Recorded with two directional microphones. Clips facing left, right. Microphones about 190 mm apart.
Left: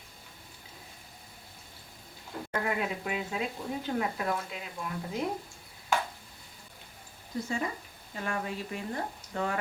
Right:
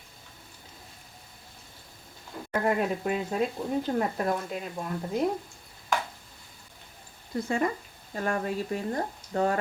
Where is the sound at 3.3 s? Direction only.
40° right (ahead or behind).